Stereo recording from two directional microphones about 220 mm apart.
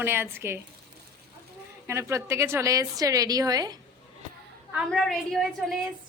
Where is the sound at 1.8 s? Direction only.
10° right (ahead or behind).